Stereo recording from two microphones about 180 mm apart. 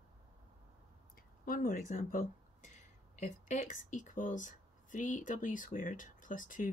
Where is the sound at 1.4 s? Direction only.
50° left (ahead or behind).